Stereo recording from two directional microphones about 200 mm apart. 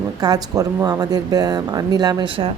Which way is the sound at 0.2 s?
20° right (ahead or behind).